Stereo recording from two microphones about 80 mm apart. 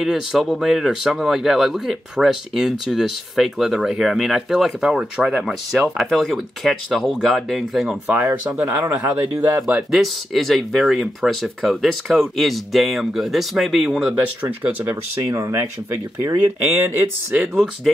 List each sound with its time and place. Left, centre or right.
0.0 s speech: centre
5.8 s speech: centre
8.1 s speech: right
9.8 s speech: centre
14.1 s speech: right
15.2 s speech: right
16.8 s speech: right
17.4 s speech: centre